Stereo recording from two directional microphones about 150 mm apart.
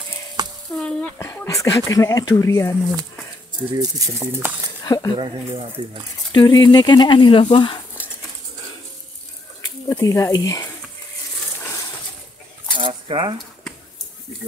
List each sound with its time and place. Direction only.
0.4 s a sound: 25° right (ahead or behind)
0.7 s speech: 10° left (ahead or behind)
3.7 s speech: 20° right (ahead or behind)
4.8 s speech: 25° left (ahead or behind)
5.1 s speech: 35° right (ahead or behind)
6.3 s speech: 30° left (ahead or behind)
9.8 s speech: 20° left (ahead or behind)
12.7 s cutlery: 35° right (ahead or behind)